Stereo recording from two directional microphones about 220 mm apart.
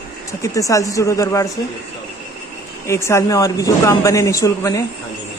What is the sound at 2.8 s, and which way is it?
A man's voice, 10° left (ahead or behind).